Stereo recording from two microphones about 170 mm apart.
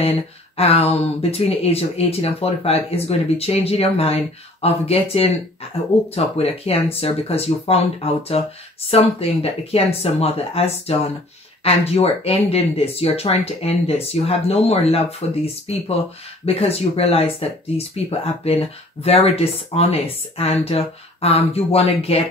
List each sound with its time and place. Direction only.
0.6 s speech: 35° left (ahead or behind)